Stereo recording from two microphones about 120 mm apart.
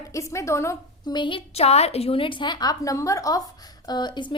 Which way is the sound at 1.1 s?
45° left (ahead or behind).